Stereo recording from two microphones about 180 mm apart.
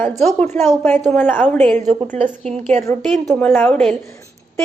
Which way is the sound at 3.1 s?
5° left (ahead or behind).